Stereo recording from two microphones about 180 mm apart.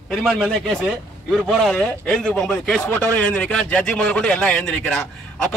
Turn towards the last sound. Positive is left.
turn(degrees=5)  # may be behind; listen again after turning